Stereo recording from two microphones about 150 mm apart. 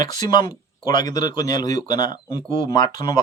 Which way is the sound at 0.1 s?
30° left (ahead or behind).